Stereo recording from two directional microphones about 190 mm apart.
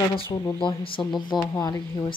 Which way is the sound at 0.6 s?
25° left (ahead or behind).